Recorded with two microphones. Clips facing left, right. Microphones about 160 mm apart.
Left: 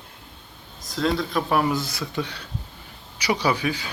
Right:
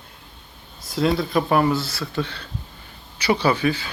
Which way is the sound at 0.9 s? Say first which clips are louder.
Right 3 dB; 5° right (ahead or behind).